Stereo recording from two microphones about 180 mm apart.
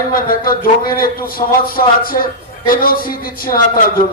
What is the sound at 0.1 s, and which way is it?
A man's voice, 55° left (ahead or behind).